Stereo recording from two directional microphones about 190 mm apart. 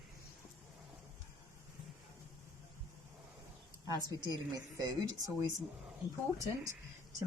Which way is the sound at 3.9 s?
20° right (ahead or behind).